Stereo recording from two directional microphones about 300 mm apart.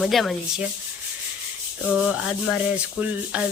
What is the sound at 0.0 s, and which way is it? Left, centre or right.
Speech, centre.